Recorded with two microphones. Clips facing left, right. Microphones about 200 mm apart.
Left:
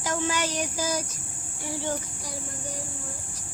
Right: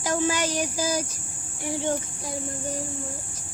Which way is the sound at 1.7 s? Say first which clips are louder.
Right 4 dB; 20° right (ahead or behind).